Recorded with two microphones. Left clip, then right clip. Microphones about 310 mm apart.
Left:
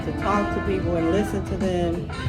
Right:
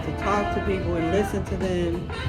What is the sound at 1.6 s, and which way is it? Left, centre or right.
Music, centre.